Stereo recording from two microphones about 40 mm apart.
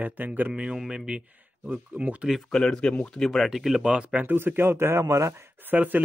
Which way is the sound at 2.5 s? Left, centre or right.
Left.